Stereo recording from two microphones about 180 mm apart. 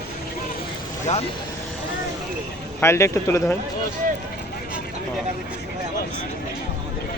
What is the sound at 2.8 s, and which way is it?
Speech, 15° left (ahead or behind).